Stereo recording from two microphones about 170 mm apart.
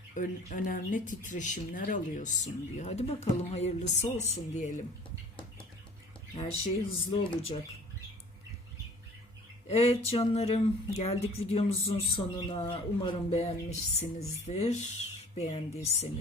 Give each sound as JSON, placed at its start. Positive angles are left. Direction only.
{"t": 0.1, "sound": "speech", "side_deg": 50}
{"t": 6.3, "sound": "speech", "side_deg": 35}
{"t": 9.6, "sound": "speech", "side_deg": 35}